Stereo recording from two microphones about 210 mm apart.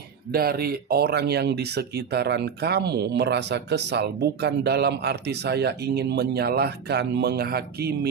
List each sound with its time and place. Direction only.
0.3 s speech: 45° right (ahead or behind)